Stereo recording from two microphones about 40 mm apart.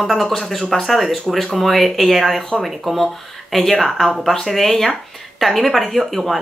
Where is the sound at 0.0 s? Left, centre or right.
Centre.